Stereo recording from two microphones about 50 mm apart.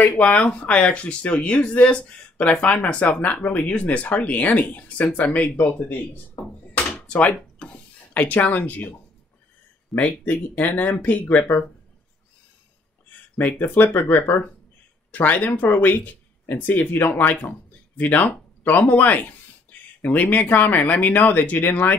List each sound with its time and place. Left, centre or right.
0.0 s speech: left
7.1 s a sound: centre
8.1 s speech: left
9.9 s speech: left
13.4 s speech: left